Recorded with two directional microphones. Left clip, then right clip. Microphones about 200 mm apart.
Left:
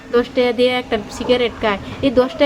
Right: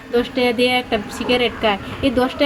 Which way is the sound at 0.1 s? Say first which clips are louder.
Left 2 dB; 15° left (ahead or behind).